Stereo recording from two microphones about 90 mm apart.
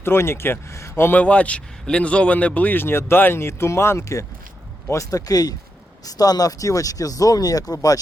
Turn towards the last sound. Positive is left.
turn(degrees=45)  # may be behind; listen again after turning